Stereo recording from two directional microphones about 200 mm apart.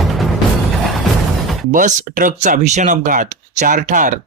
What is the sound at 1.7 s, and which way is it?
Speech, 40° right (ahead or behind).